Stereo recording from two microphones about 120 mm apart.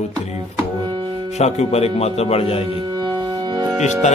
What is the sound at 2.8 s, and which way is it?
Music, 35° right (ahead or behind).